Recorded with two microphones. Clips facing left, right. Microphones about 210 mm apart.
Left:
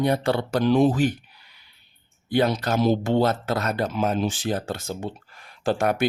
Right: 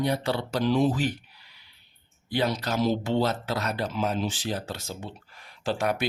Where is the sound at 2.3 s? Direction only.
50° left (ahead or behind).